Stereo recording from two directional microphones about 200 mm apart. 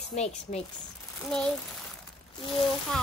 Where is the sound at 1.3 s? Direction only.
Centre (ahead or behind).